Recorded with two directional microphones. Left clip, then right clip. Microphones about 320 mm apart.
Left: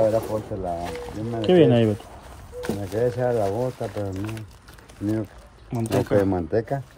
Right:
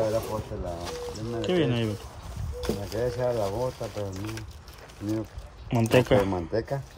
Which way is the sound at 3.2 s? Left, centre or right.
Left.